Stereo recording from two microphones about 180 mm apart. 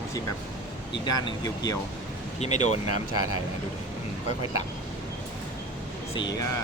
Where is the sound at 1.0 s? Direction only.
20° left (ahead or behind).